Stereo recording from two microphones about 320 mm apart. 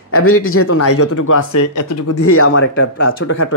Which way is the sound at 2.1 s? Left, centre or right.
Left.